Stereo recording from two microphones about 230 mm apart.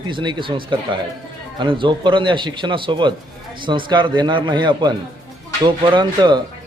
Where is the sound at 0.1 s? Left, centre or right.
Right.